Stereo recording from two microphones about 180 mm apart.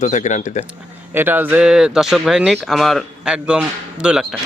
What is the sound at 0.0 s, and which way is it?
Speech, 40° left (ahead or behind).